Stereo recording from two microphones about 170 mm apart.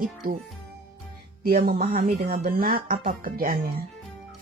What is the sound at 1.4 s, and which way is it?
Speech, 65° right (ahead or behind).